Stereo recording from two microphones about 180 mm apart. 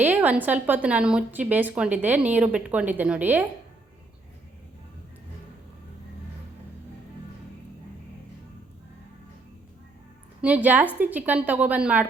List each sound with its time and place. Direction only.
0.0 s a woman's voice: 10° right (ahead or behind)
10.4 s a woman's voice: 10° right (ahead or behind)